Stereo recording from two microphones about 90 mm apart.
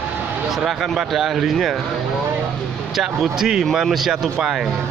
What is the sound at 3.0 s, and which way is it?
Speech, 5° right (ahead or behind).